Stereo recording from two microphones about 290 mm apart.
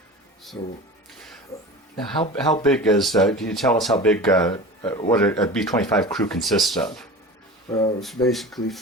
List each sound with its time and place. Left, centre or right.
0.6 s speech: centre
2.6 s speech: centre
7.7 s speech: centre
8.3 s speech: centre